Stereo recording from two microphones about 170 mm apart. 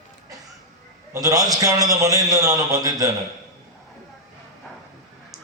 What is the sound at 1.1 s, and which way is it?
Mantra, 20° right (ahead or behind).